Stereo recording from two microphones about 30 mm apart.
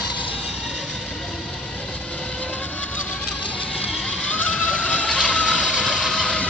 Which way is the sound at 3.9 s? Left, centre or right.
Left.